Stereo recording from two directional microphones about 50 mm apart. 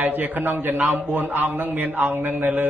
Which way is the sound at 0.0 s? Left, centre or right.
Right.